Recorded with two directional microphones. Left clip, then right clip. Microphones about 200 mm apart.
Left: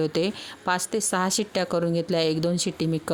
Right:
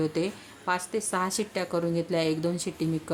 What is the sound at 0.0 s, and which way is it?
Speech, 40° left (ahead or behind).